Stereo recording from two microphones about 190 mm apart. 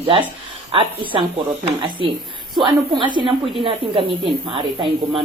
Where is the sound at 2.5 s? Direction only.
25° right (ahead or behind).